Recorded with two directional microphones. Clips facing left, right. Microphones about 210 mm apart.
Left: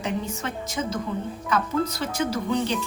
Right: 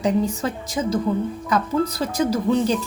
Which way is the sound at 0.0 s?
35° right (ahead or behind).